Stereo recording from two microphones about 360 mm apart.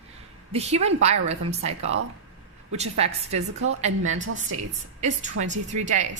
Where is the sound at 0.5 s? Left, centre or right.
Centre.